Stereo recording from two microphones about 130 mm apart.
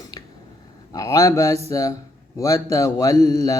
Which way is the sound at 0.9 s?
25° left (ahead or behind).